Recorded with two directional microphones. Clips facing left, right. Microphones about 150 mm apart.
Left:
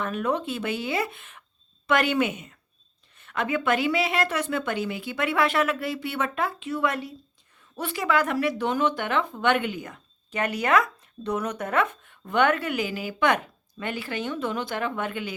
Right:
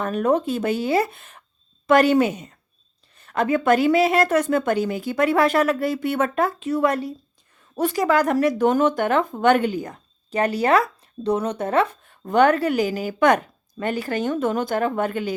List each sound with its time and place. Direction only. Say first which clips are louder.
0.0 s speech: right 6 dB; 40° right (ahead or behind)